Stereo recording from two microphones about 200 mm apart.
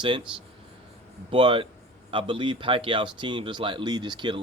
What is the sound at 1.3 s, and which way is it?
Speech, 25° right (ahead or behind).